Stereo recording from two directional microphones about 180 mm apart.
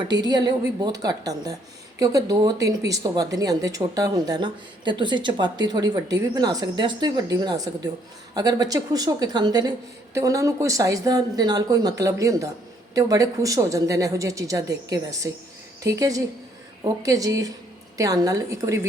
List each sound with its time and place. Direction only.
0.1 s a woman's voice: 25° right (ahead or behind)